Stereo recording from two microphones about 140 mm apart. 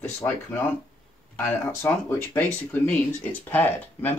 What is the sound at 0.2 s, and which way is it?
Speech, 15° left (ahead or behind).